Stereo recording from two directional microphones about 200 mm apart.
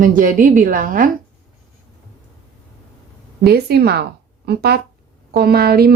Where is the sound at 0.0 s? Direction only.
45° right (ahead or behind).